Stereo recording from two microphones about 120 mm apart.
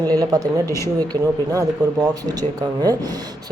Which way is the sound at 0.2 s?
30° right (ahead or behind).